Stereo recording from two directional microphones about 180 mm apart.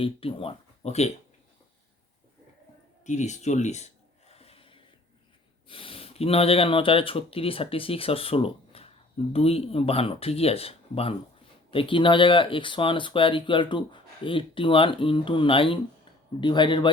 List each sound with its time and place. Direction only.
0.0 s speech: 30° left (ahead or behind)
3.0 s a sound: 40° left (ahead or behind)
5.6 s speech: 30° left (ahead or behind)